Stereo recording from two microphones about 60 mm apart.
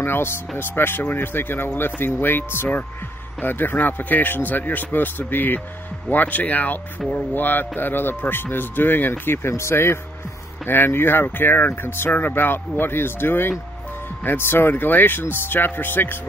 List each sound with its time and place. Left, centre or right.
0.0 s speech: left
10.6 s speech: left